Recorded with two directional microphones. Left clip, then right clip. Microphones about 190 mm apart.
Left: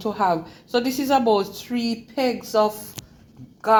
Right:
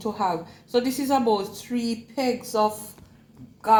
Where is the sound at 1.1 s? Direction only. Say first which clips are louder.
Left 3 dB; 15° left (ahead or behind).